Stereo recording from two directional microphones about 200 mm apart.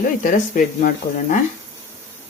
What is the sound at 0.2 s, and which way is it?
Speech, 40° left (ahead or behind).